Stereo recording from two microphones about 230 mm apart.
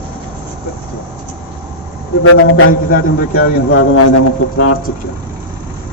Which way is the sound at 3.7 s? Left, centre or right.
Left.